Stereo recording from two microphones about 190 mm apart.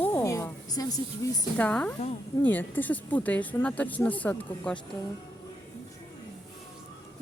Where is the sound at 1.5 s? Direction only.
5° left (ahead or behind).